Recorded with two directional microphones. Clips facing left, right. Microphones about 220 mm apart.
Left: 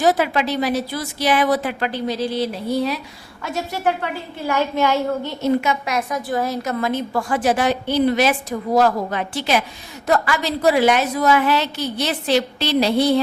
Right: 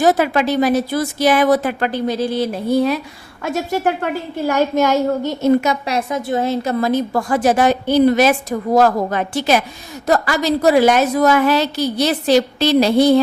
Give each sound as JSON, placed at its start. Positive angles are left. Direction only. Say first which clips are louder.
{"t": 0.0, "sound": "a woman's voice", "louder": "right 3 dB", "side_deg": -50}